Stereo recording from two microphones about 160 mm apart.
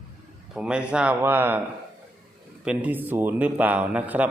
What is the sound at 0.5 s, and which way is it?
Speech, 5° right (ahead or behind).